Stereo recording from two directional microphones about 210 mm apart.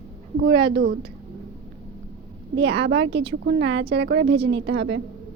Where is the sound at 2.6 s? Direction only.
55° right (ahead or behind).